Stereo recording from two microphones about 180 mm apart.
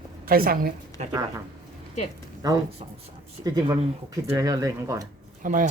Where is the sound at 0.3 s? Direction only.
55° right (ahead or behind).